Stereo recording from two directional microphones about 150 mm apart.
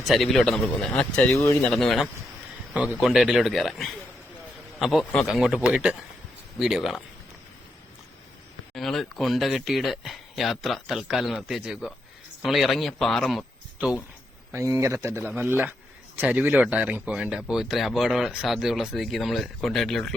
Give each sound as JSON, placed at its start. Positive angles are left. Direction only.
{"t": 0.1, "sound": "speech", "side_deg": 0}
{"t": 2.7, "sound": "speech", "side_deg": -10}
{"t": 8.7, "sound": "speech", "side_deg": 0}
{"t": 14.5, "sound": "speech", "side_deg": -20}
{"t": 15.2, "sound": "a man's voice", "side_deg": -5}